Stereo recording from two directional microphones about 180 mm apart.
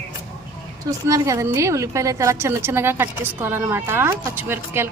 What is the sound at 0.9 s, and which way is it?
A woman's voice, 20° right (ahead or behind).